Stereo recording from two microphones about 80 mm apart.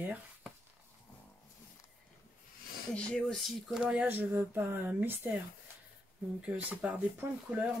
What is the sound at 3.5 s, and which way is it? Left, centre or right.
Speech, centre.